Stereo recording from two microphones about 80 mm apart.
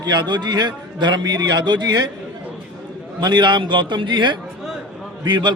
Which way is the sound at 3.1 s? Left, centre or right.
Right.